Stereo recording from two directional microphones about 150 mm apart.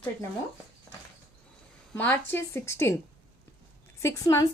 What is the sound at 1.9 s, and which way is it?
A woman's voice, 10° left (ahead or behind).